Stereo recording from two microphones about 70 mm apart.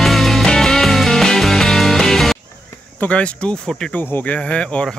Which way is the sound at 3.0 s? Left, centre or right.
Centre.